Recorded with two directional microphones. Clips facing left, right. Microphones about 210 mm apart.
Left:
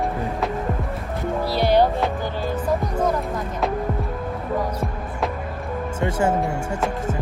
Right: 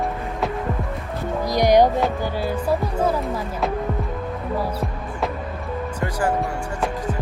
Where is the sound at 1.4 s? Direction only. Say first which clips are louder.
Right 3 dB; 15° right (ahead or behind).